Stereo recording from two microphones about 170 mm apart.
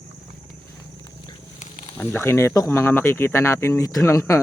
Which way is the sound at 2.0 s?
15° left (ahead or behind).